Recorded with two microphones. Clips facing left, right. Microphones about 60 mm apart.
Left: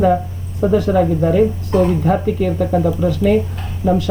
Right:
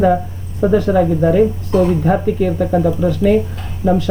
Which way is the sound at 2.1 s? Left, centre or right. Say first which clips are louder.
Right 1 dB; centre.